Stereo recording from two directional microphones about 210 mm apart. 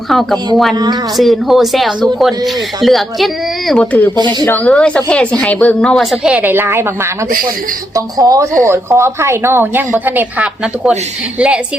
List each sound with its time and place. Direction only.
0.1 s a woman's voice: centre (ahead or behind)
4.1 s speech: 20° right (ahead or behind)
4.4 s a woman's voice: 5° left (ahead or behind)